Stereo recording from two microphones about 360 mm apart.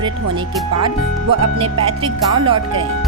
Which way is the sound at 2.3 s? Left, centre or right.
Centre.